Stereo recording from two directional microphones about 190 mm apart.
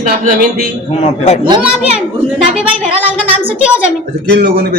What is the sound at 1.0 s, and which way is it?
Speech, 35° left (ahead or behind).